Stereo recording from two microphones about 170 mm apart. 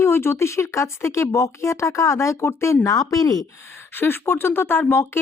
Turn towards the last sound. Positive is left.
turn(degrees=15)  # may be behind; listen again after turning